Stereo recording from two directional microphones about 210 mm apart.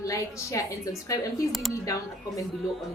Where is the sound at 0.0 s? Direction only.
15° left (ahead or behind).